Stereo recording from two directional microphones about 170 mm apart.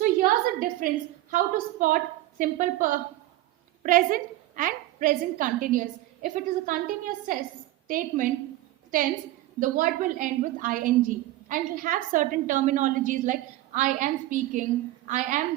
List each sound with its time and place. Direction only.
0.0 s a woman's voice: 50° right (ahead or behind)
9.6 s a woman's voice: 50° right (ahead or behind)